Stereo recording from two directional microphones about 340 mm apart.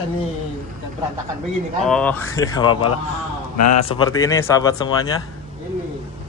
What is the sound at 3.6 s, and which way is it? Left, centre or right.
Speech, left.